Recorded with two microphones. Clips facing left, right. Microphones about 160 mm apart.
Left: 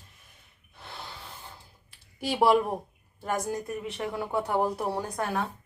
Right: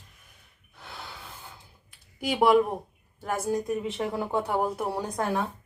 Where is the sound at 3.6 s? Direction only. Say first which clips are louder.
Right 4 dB; 25° right (ahead or behind).